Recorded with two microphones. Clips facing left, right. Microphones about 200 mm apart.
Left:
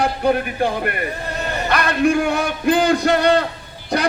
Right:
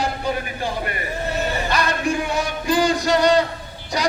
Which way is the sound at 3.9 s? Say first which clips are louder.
Left 3 dB; 55° left (ahead or behind).